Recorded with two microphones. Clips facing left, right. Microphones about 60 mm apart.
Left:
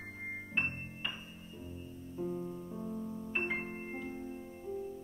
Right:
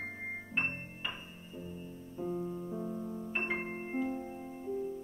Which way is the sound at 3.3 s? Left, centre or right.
Centre.